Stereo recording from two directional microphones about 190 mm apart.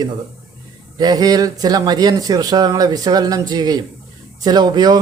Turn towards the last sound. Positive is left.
turn(degrees=-20)  # may be behind; listen again after turning